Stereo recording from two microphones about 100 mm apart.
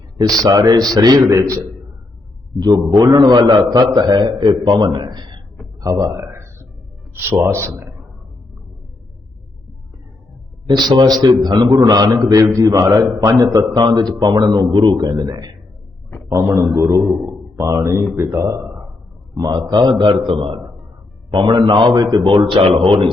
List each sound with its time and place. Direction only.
0.2 s a man's voice: 40° right (ahead or behind)
2.6 s a man's voice: 45° right (ahead or behind)
5.8 s a sound: 35° right (ahead or behind)
7.1 s speech: 30° right (ahead or behind)
10.7 s a man's voice: 45° right (ahead or behind)
13.7 s a man's voice: 45° right (ahead or behind)
16.6 s speech: 30° right (ahead or behind)
19.3 s a man's voice: 40° right (ahead or behind)
20.2 s a man's voice: 55° right (ahead or behind)
22.2 s speech: 55° right (ahead or behind)